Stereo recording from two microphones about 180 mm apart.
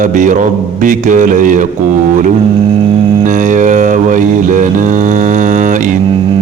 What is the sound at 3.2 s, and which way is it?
Mantra, 45° right (ahead or behind).